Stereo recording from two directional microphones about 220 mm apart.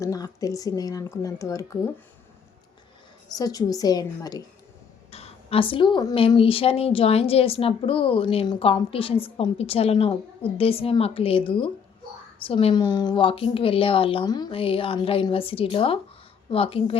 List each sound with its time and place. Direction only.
0.0 s speech: 15° left (ahead or behind)
3.3 s speech: 15° left (ahead or behind)
5.1 s speech: 25° left (ahead or behind)